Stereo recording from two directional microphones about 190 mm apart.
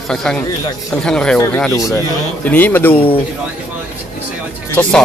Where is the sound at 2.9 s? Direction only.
30° left (ahead or behind).